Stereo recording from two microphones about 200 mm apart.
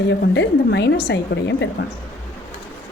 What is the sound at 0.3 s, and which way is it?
A woman's voice, 60° left (ahead or behind).